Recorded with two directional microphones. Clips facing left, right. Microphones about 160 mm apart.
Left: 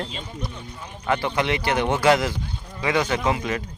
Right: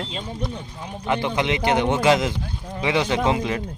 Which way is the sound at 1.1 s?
20° right (ahead or behind).